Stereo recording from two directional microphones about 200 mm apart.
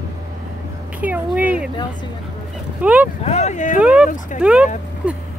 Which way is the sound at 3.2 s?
35° left (ahead or behind).